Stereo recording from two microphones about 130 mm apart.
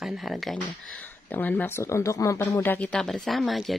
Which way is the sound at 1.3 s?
15° left (ahead or behind).